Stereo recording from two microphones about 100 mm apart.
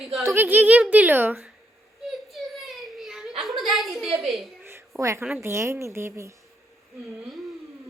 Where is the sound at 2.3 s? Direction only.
Centre (ahead or behind).